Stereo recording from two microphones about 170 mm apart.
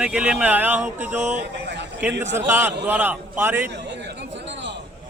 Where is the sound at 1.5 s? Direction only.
90° right.